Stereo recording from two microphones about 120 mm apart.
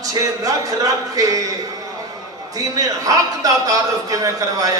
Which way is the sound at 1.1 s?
30° right (ahead or behind).